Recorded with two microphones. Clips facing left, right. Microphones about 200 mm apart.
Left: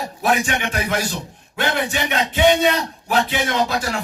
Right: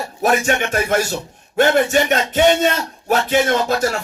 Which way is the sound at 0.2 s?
45° right (ahead or behind).